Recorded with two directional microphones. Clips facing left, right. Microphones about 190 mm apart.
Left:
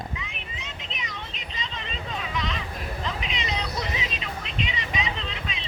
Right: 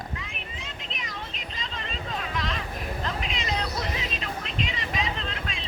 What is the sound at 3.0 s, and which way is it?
Cat, centre (ahead or behind).